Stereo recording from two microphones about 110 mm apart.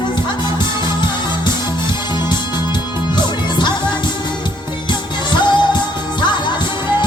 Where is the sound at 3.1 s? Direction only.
45° left (ahead or behind).